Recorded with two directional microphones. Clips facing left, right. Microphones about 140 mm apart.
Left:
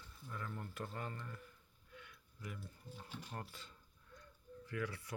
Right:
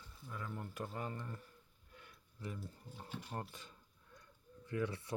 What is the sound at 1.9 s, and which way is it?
Speech, 40° right (ahead or behind).